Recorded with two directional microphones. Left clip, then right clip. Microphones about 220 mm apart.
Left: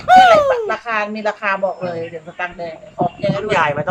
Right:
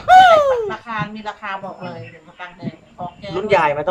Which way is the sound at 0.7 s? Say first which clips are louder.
Left 6 dB; 50° left (ahead or behind).